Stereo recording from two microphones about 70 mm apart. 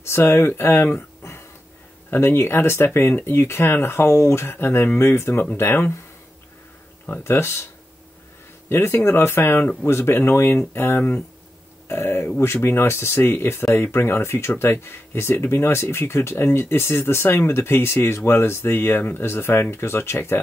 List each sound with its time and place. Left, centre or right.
0.0 s speech: left
7.2 s speech: left
8.6 s speech: left